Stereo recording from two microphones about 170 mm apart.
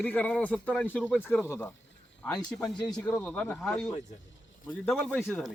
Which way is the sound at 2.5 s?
Centre (ahead or behind).